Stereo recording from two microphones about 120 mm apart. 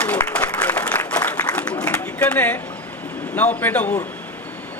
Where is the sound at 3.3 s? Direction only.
15° left (ahead or behind).